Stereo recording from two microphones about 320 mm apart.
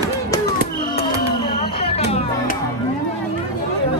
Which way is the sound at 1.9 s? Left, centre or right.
Centre.